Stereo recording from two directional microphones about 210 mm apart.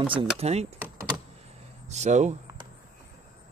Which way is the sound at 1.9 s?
35° right (ahead or behind).